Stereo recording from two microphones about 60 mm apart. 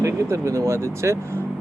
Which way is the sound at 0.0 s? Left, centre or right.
Right.